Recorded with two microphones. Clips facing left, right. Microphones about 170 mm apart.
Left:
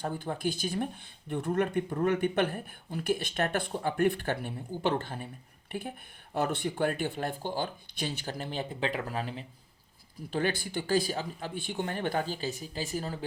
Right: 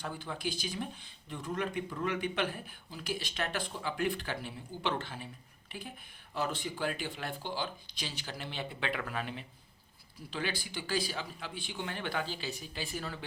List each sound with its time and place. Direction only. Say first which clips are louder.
0.0 s speech: left 6 dB; 50° left (ahead or behind)
6.3 s speech: left 5 dB; 55° left (ahead or behind); by 9.5 s 35° left (ahead or behind)
10.2 s speech: left 7 dB; 50° left (ahead or behind)